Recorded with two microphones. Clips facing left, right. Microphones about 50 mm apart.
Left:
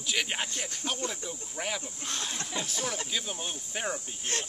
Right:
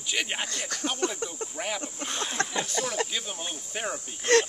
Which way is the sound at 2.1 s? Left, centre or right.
Centre.